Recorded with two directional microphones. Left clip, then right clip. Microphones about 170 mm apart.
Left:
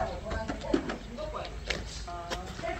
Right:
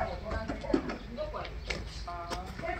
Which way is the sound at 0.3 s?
60° right (ahead or behind).